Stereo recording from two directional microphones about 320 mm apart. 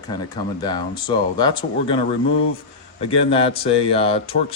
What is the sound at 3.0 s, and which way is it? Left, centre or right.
Speech, centre.